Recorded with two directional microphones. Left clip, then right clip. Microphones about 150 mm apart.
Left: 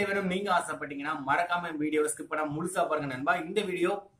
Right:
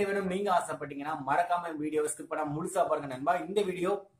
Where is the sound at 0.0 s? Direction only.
5° right (ahead or behind).